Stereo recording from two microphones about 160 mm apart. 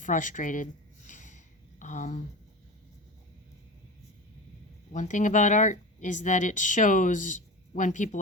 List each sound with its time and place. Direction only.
0.0 s a sound: 55° left (ahead or behind)
1.8 s speech: 50° left (ahead or behind)
4.9 s speech: 50° left (ahead or behind)